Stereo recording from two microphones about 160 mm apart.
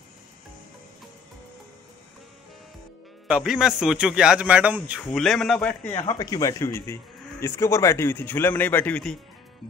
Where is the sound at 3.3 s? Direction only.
5° right (ahead or behind).